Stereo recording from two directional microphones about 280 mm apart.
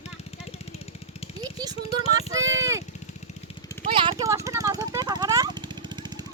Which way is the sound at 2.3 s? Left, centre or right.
Centre.